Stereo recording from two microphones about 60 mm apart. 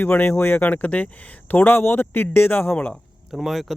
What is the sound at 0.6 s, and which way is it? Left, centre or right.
Speech, left.